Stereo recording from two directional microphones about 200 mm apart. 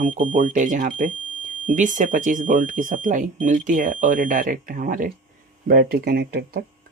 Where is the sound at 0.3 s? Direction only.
40° right (ahead or behind).